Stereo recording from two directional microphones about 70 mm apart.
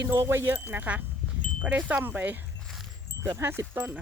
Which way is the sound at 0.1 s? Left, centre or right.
Right.